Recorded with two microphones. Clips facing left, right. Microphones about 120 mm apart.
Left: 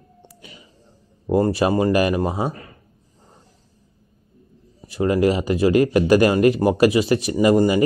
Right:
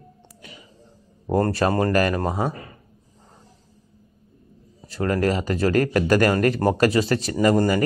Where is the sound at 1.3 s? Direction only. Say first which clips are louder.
Left 2 dB; 10° left (ahead or behind).